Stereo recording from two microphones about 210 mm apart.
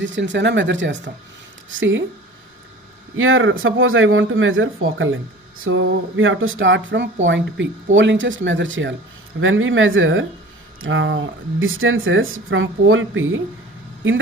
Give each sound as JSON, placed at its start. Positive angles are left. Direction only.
{"t": 0.0, "sound": "speech", "side_deg": -60}
{"t": 3.2, "sound": "speech", "side_deg": -70}